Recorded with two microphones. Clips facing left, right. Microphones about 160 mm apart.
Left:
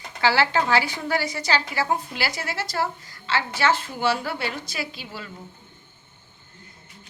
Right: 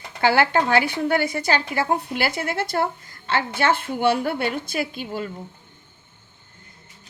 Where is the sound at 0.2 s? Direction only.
55° right (ahead or behind).